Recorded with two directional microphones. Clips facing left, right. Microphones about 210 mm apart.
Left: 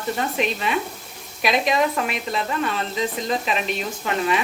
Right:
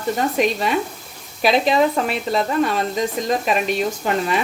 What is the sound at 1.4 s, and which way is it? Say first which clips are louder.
A woman's voice: right 4 dB; 30° right (ahead or behind).